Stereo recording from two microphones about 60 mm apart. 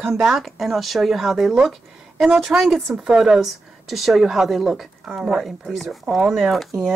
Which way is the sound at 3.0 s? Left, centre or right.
Centre.